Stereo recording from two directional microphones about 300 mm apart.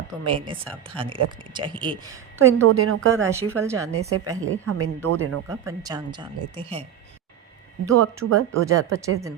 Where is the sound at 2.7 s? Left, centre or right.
Right.